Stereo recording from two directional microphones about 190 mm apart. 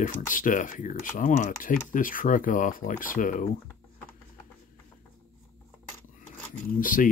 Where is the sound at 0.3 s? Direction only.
45° left (ahead or behind).